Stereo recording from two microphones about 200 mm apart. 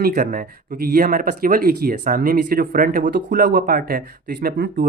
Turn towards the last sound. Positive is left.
turn(degrees=-45)  # may be behind; listen again after turning